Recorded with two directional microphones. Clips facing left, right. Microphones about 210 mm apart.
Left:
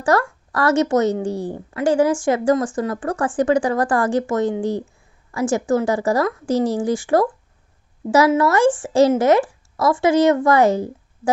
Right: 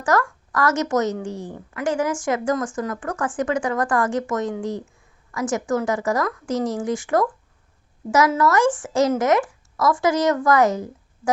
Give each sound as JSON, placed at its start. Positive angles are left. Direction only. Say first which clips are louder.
{"t": 0.0, "sound": "a woman's voice", "louder": "left 3 dB", "side_deg": 30}